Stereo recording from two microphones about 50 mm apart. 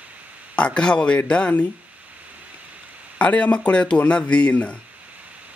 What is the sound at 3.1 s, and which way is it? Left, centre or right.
Speech, left.